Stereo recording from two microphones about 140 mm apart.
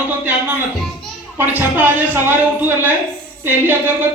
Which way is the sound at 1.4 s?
15° right (ahead or behind).